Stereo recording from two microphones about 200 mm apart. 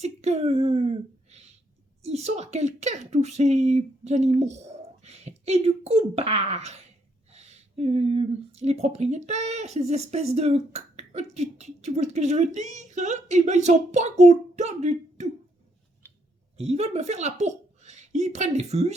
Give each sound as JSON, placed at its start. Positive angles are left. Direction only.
{"t": 0.0, "sound": "speech", "side_deg": -35}
{"t": 16.0, "sound": "clicking", "side_deg": 10}
{"t": 16.6, "sound": "a woman's voice", "side_deg": -30}